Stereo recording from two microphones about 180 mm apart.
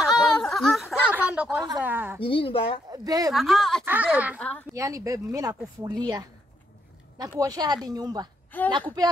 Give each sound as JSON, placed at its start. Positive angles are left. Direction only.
{"t": 0.0, "sound": "a sound", "side_deg": 0}
{"t": 1.8, "sound": "speech", "side_deg": -10}
{"t": 2.2, "sound": "a woman's voice", "side_deg": 30}
{"t": 2.9, "sound": "speech", "side_deg": -20}
{"t": 3.3, "sound": "a woman's voice", "side_deg": 0}
{"t": 3.8, "sound": "speech", "side_deg": -10}
{"t": 4.4, "sound": "a woman's voice", "side_deg": 5}
{"t": 4.7, "sound": "speech", "side_deg": -20}
{"t": 8.5, "sound": "a woman's voice", "side_deg": 10}